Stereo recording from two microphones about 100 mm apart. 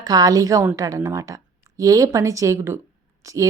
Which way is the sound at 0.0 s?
40° right (ahead or behind).